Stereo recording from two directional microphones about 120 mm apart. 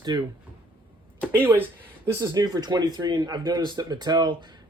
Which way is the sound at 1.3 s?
20° right (ahead or behind).